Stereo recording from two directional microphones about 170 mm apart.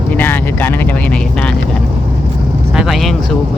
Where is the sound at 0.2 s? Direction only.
10° left (ahead or behind).